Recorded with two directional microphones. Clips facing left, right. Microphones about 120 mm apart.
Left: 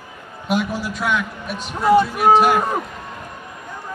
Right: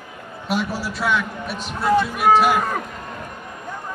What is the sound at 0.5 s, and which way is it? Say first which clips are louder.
A man's voice: left 2 dB; 5° right (ahead or behind).